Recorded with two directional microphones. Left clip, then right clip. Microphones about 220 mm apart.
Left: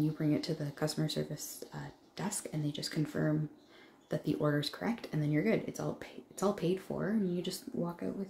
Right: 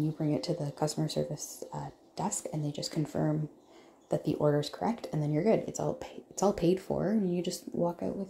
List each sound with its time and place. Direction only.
0.3 s speech: 10° right (ahead or behind)